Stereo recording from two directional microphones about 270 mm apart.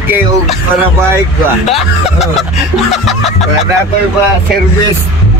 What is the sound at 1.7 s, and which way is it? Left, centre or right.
Speech, centre.